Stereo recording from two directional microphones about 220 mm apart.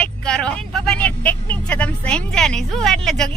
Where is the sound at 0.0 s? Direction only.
5° left (ahead or behind).